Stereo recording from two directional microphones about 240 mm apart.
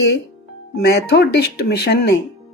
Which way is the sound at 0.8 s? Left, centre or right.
Left.